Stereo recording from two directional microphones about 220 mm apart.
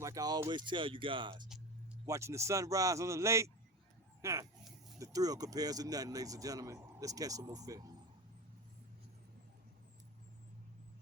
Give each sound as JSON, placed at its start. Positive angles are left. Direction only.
{"t": 0.0, "sound": "speech", "side_deg": -15}